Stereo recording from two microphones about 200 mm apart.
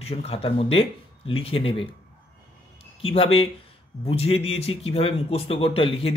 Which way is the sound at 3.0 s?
30° left (ahead or behind).